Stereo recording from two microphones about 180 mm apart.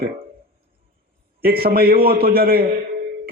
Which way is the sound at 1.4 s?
55° right (ahead or behind).